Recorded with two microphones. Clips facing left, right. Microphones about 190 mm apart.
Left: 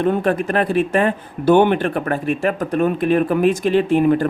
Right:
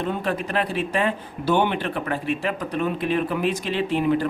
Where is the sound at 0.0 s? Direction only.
50° left (ahead or behind).